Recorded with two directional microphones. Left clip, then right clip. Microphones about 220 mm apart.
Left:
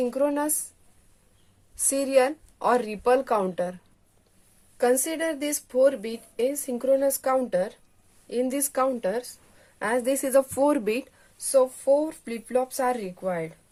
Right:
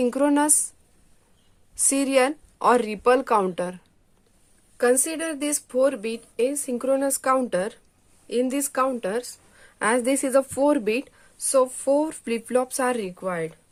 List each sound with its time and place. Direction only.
0.0 s speech: 40° right (ahead or behind)
1.7 s speech: 35° right (ahead or behind)
4.8 s a woman's voice: 20° right (ahead or behind)
11.4 s speech: 40° right (ahead or behind)